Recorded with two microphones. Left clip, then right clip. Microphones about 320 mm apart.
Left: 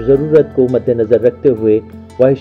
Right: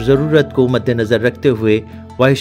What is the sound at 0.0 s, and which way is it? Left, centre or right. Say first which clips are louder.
Speech: left 3 dB; right.